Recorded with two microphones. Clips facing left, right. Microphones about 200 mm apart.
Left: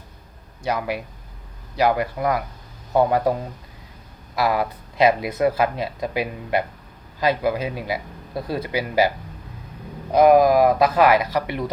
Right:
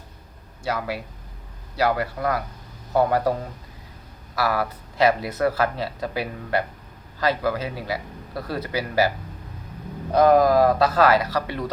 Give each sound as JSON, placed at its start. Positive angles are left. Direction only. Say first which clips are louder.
{"t": 0.6, "sound": "speech", "louder": "left 3 dB", "side_deg": 20}
{"t": 4.4, "sound": "speech", "louder": "left 2 dB", "side_deg": 20}